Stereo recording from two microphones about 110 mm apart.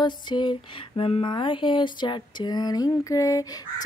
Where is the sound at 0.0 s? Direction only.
45° left (ahead or behind).